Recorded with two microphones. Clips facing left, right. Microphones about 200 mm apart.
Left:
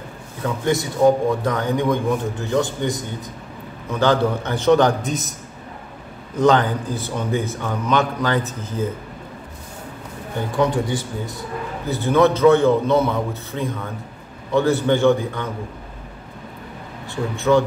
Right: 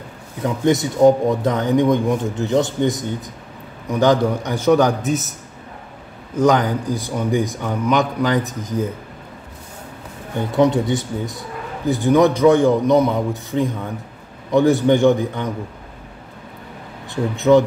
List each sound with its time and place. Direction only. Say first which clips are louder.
0.4 s a man's voice: right 4 dB; 15° right (ahead or behind)
6.3 s a man's voice: right 1 dB; 10° right (ahead or behind)
10.5 s a man's voice: right 4 dB; 20° right (ahead or behind)
17.1 s a man's voice: right 4 dB; 20° right (ahead or behind)